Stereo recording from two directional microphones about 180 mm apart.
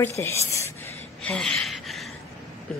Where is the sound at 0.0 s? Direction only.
15° left (ahead or behind).